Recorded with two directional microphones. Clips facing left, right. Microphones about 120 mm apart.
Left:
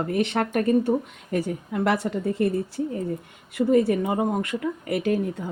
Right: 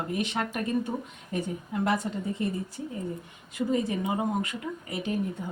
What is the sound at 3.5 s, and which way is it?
A woman's voice, 65° left (ahead or behind).